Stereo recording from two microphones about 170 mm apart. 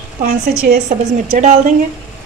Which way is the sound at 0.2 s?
65° right (ahead or behind).